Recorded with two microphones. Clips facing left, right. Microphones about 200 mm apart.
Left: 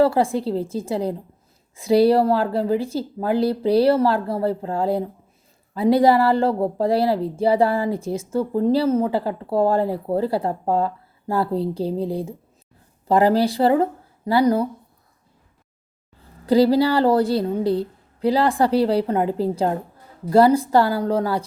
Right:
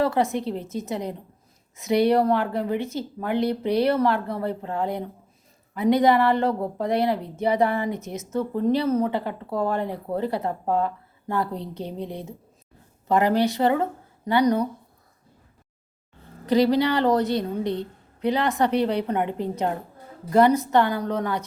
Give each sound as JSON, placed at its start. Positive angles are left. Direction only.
{"t": 0.0, "sound": "a woman's voice", "side_deg": 30}
{"t": 16.5, "sound": "speech", "side_deg": 30}